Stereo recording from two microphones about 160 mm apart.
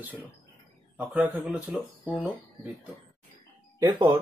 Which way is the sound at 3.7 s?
25° right (ahead or behind).